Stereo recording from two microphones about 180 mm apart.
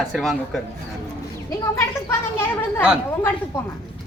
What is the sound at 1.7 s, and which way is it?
Speech, 15° left (ahead or behind).